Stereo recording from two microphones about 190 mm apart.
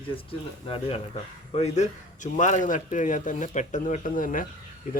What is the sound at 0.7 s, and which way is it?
A man's voice, 30° left (ahead or behind).